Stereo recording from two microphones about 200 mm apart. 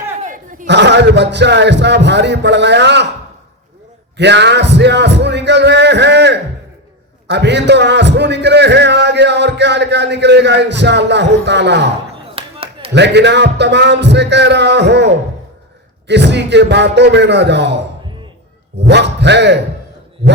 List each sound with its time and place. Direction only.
0.2 s chatter: 40° right (ahead or behind)
0.7 s a man's voice: 60° right (ahead or behind)
4.2 s a man's voice: 60° right (ahead or behind)
12.3 s a sound: 30° right (ahead or behind)
12.9 s a man's voice: 60° right (ahead or behind)
18.9 s a man's voice: 60° right (ahead or behind)